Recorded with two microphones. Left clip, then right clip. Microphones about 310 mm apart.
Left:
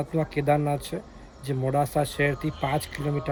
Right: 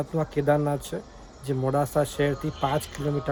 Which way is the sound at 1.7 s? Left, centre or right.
Right.